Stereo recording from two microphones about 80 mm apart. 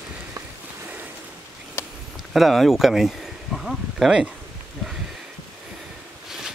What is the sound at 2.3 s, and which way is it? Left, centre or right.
Speech, centre.